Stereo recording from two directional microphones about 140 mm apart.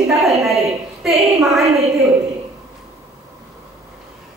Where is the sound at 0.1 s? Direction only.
Centre (ahead or behind).